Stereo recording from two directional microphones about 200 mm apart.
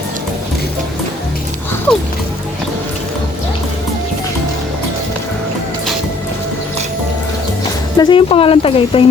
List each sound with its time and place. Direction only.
7.9 s speech: 25° left (ahead or behind)